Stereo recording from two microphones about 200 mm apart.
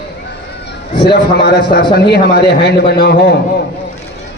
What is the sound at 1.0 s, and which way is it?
A man's voice, 55° left (ahead or behind).